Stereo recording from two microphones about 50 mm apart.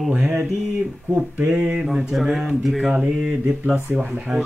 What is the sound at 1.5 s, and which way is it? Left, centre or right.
Speech, right.